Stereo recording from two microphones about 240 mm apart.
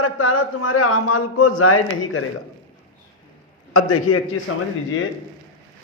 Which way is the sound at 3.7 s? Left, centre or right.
Left.